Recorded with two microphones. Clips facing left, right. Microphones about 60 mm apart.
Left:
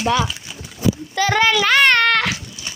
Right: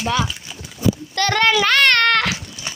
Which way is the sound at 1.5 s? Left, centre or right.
Centre.